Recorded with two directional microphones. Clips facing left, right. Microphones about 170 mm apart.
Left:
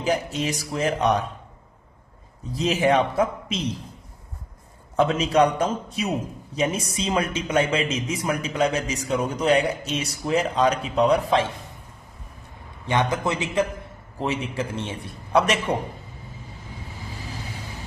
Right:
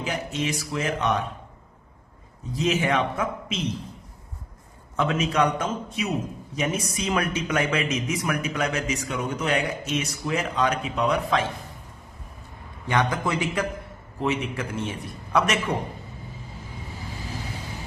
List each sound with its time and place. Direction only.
0.0 s a man's voice: 35° left (ahead or behind)
2.5 s a man's voice: 35° left (ahead or behind)
4.9 s a man's voice: 35° left (ahead or behind)
12.9 s a man's voice: 20° left (ahead or behind)